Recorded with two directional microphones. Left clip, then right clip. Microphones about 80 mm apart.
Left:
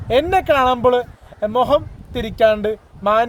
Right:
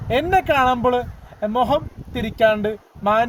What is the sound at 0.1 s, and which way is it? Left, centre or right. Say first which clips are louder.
Speech: left 2 dB; left.